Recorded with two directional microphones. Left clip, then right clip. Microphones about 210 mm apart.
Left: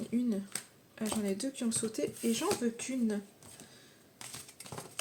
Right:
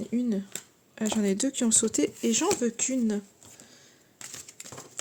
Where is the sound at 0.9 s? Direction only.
45° right (ahead or behind).